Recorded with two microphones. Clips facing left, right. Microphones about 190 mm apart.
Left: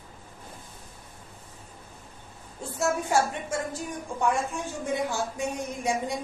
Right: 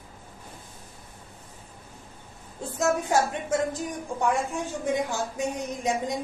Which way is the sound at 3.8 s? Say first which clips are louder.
Right 1 dB; 15° right (ahead or behind).